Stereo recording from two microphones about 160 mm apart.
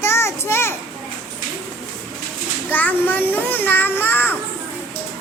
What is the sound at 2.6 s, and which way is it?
A child's voice, 10° left (ahead or behind).